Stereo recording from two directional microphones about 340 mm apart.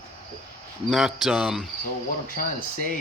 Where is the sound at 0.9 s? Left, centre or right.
Centre.